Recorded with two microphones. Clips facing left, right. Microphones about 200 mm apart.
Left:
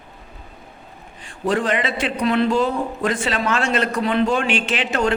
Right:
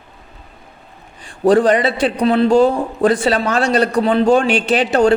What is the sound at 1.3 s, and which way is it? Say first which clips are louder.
A man's voice: right 9 dB; 35° right (ahead or behind).